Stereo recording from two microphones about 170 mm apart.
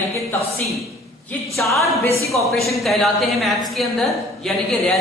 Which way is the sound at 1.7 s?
15° left (ahead or behind).